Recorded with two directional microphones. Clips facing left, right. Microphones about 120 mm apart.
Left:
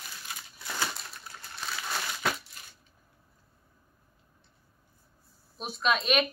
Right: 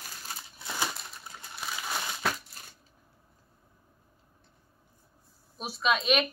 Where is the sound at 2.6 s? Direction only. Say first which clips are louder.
Right 1 dB; 40° right (ahead or behind).